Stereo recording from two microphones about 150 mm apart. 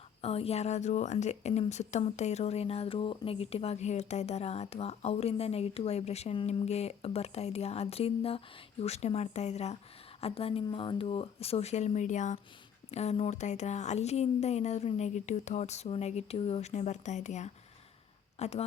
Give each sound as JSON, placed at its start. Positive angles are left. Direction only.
{"t": 0.2, "sound": "a woman's voice", "side_deg": 40}